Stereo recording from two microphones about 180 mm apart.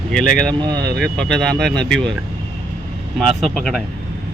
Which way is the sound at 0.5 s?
25° right (ahead or behind).